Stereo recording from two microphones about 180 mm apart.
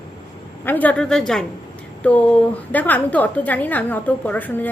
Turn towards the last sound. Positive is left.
turn(degrees=10)  # may be behind; listen again after turning